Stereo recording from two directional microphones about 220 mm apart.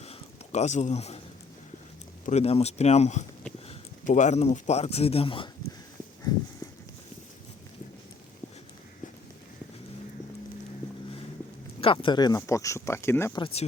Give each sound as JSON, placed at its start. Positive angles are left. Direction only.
{"t": 0.0, "sound": "a sound", "side_deg": 30}
{"t": 2.2, "sound": "speech", "side_deg": 30}
{"t": 11.8, "sound": "speech", "side_deg": 25}
{"t": 13.4, "sound": "speech", "side_deg": 25}